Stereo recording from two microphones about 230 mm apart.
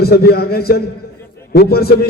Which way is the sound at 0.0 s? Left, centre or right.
Left.